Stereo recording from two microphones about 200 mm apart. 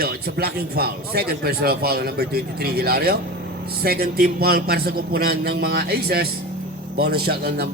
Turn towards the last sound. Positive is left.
turn(degrees=-55)  # may be behind; listen again after turning